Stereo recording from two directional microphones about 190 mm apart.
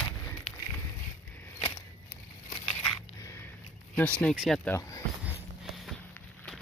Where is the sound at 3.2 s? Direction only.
15° left (ahead or behind).